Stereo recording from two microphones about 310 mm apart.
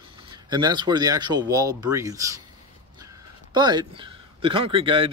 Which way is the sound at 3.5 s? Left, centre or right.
Centre.